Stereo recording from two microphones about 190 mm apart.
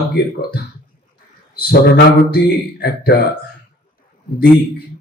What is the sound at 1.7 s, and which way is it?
Speech, 55° left (ahead or behind).